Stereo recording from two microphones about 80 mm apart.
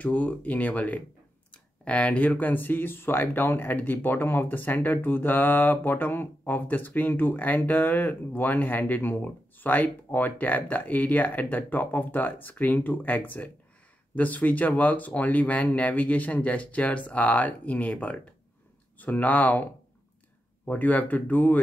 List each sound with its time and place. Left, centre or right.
0.0 s speech: centre
20.6 s speech: centre